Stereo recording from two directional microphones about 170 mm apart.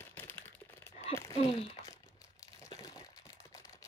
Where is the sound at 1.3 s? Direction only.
40° left (ahead or behind).